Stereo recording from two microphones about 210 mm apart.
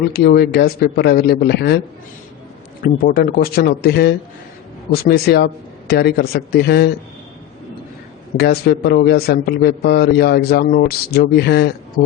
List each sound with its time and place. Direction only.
0.1 s a man's voice: 50° left (ahead or behind)
2.8 s a man's voice: 45° left (ahead or behind)
8.4 s a man's voice: 50° left (ahead or behind)